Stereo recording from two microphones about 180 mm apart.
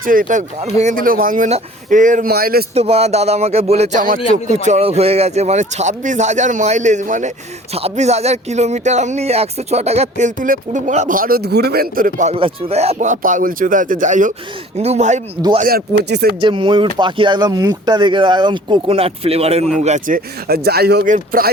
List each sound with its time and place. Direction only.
0.0 s speech: 50° right (ahead or behind)
2.7 s speech: 35° right (ahead or behind)
12.3 s speech: 35° right (ahead or behind)
15.6 s speech: 65° right (ahead or behind)
16.4 s speech: 30° right (ahead or behind); by 21.5 s 55° right (ahead or behind)